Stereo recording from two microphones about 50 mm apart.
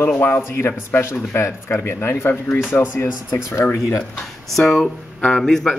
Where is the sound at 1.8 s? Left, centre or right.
Left.